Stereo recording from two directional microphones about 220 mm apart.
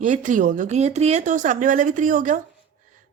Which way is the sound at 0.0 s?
35° right (ahead or behind).